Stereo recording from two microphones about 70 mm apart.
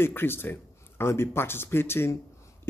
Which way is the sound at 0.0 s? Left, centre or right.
Left.